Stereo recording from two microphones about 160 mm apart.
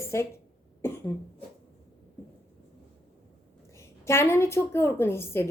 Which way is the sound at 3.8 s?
15° left (ahead or behind).